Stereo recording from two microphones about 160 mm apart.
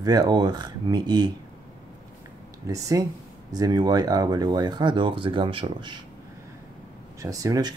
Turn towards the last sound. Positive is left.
turn(degrees=-20)  # may be behind; listen again after turning